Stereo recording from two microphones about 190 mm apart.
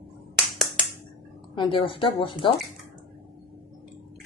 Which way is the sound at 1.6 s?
25° left (ahead or behind).